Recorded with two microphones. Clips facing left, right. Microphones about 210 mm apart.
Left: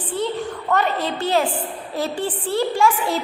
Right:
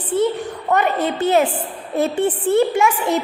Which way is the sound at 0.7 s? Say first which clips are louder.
Right 3 dB; 20° right (ahead or behind).